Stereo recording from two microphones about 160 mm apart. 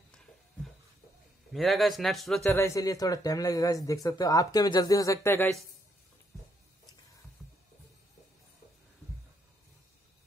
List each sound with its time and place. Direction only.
1.5 s speech: centre (ahead or behind)
2.5 s speech: 20° left (ahead or behind)